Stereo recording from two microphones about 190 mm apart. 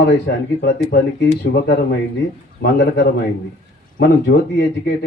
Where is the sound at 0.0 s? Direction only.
60° left (ahead or behind).